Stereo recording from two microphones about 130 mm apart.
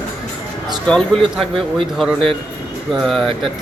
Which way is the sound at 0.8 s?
5° left (ahead or behind).